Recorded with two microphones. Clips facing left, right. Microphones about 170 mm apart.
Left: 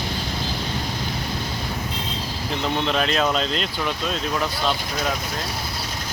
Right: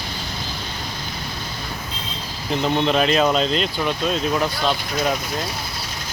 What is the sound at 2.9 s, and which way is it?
Speech, 5° right (ahead or behind).